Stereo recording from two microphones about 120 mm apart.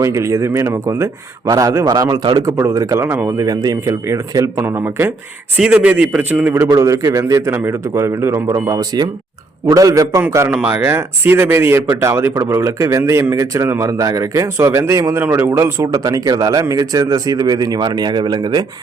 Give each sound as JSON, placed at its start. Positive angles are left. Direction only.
{"t": 0.0, "sound": "speech", "side_deg": -25}
{"t": 2.5, "sound": "a man's voice", "side_deg": -25}
{"t": 6.7, "sound": "speech", "side_deg": -25}
{"t": 10.5, "sound": "speech", "side_deg": -15}